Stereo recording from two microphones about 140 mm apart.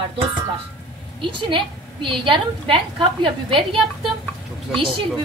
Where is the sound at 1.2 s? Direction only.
35° right (ahead or behind).